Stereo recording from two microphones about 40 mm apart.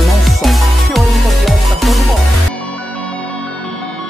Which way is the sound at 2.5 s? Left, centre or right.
Left.